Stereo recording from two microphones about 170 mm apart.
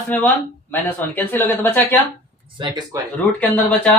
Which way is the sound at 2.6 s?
25° right (ahead or behind).